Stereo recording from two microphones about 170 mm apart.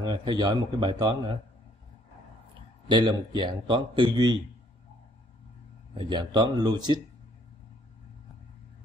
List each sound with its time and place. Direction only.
0.0 s speech: 25° right (ahead or behind)
2.9 s speech: 25° right (ahead or behind)
6.0 s speech: 25° right (ahead or behind)